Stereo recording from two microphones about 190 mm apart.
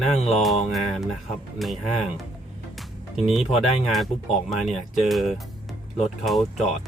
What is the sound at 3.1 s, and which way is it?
Speech, centre (ahead or behind).